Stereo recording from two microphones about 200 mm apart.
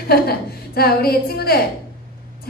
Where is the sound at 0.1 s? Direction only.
50° left (ahead or behind).